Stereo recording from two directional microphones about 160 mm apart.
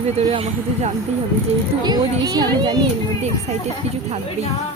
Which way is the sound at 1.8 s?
25° right (ahead or behind).